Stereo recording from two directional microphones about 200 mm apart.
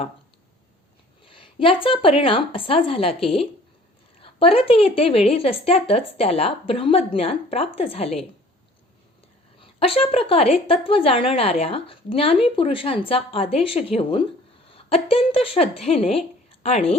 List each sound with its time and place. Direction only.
1.2 s a woman's voice: 25° left (ahead or behind)
9.6 s a woman's voice: 30° left (ahead or behind)